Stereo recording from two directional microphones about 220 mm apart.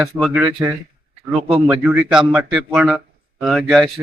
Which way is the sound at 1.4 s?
25° right (ahead or behind).